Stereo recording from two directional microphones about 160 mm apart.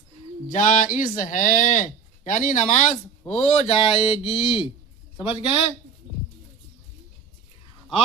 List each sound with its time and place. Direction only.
0.5 s speech: 55° left (ahead or behind); by 5.5 s 30° left (ahead or behind)